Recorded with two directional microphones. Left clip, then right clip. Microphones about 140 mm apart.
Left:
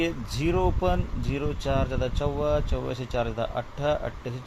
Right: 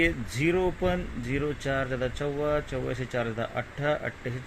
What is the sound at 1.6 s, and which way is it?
Speech, 15° left (ahead or behind).